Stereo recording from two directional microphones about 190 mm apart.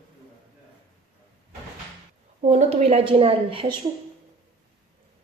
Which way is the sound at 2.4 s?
35° right (ahead or behind).